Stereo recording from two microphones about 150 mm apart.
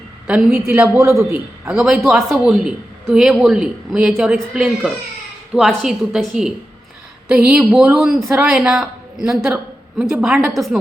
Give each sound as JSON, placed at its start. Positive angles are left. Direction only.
{"t": 0.3, "sound": "a man's voice", "side_deg": -5}
{"t": 1.7, "sound": "a man's voice", "side_deg": -5}